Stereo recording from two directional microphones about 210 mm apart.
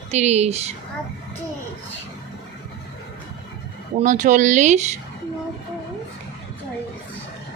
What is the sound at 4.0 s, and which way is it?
A woman's voice, 35° right (ahead or behind).